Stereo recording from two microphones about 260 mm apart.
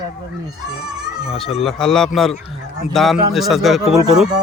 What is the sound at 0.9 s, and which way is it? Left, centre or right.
Speech, centre.